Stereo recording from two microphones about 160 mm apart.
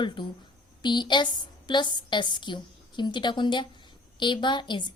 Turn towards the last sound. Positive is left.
turn(degrees=30)  # may be behind; listen again after turning